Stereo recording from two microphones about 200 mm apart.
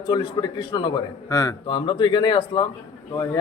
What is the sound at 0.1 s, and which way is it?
A man's voice, 20° left (ahead or behind).